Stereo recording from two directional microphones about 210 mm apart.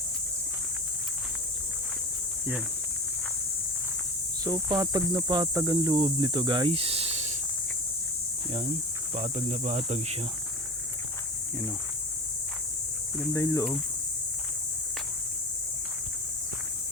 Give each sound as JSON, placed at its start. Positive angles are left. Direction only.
{"t": 4.4, "sound": "speech", "side_deg": -15}
{"t": 9.1, "sound": "speech", "side_deg": -35}
{"t": 13.3, "sound": "speech", "side_deg": 15}